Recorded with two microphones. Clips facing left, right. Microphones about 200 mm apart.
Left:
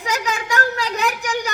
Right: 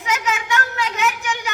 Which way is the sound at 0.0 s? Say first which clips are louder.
Even; 35° left (ahead or behind).